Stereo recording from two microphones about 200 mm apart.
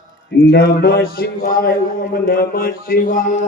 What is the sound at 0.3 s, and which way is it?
A man's voice, 55° left (ahead or behind).